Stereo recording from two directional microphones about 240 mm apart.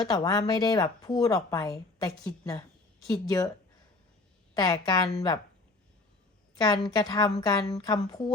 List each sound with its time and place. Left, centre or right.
0.1 s a woman's voice: centre
4.5 s a woman's voice: centre
6.6 s a woman's voice: centre